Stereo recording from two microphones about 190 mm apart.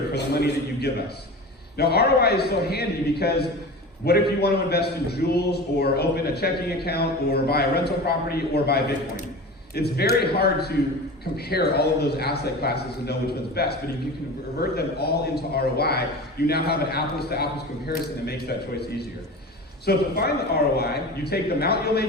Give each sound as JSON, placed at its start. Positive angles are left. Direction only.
{"t": 0.1, "sound": "a man's voice", "side_deg": 60}